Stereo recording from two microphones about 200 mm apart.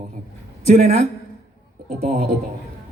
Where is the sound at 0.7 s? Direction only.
40° right (ahead or behind).